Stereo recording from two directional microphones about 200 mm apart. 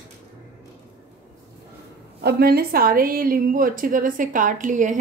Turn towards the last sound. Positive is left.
turn(degrees=-40)  # may be behind; listen again after turning